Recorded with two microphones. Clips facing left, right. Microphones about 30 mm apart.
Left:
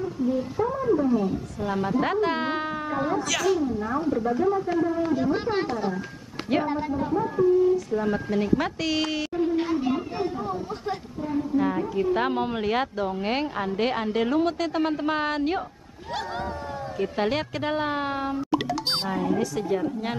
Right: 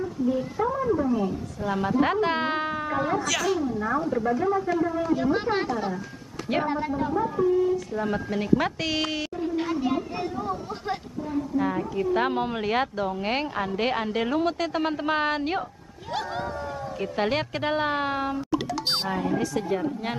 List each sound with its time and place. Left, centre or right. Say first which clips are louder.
0.7 s cat: left 1 dB; centre
1.2 s a woman's voice: left 1 dB; centre
1.8 s speech: right 1 dB; centre
4.3 s speech: left 1 dB; right
5.1 s a woman's voice: even; centre
7.7 s a woman's voice: left 2 dB; centre
11.5 s a woman's voice: left 2 dB; centre
17.0 s a woman's voice: left 1 dB; centre